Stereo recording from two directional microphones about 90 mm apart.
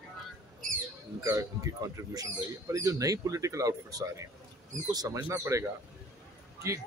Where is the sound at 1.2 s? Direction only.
35° right (ahead or behind).